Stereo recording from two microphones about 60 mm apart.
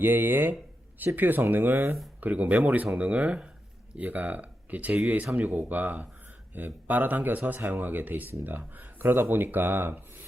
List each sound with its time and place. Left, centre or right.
0.0 s speech: right